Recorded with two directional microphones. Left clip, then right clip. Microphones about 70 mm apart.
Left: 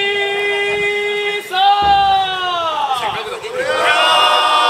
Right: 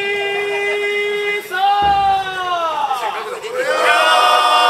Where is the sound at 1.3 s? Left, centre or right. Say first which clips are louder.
Left 4 dB; left.